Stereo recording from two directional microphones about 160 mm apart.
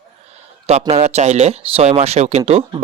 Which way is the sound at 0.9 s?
40° right (ahead or behind).